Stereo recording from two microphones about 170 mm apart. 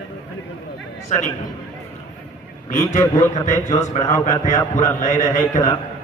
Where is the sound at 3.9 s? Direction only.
45° left (ahead or behind).